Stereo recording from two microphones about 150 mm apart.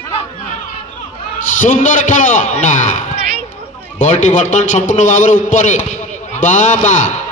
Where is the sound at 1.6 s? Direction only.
60° left (ahead or behind).